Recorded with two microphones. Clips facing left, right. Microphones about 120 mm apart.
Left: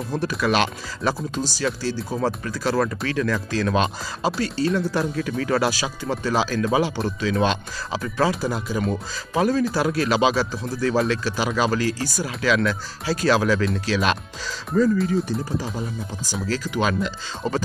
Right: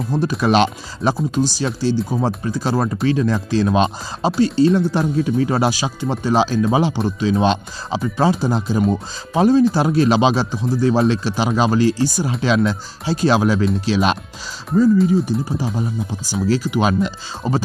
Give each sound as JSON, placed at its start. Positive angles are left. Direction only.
{"t": 0.1, "sound": "speech", "side_deg": -20}
{"t": 16.3, "sound": "speech", "side_deg": -10}